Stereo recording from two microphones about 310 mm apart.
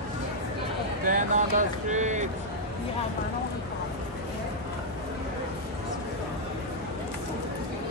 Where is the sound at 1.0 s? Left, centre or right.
Right.